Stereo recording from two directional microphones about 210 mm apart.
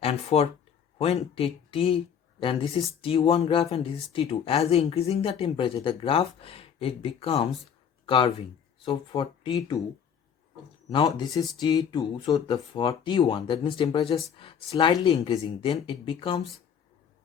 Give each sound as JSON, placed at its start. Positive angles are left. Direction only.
{"t": 0.0, "sound": "speech", "side_deg": 30}
{"t": 10.8, "sound": "speech", "side_deg": 20}